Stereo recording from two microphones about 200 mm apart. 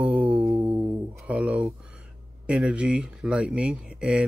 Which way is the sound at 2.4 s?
5° right (ahead or behind).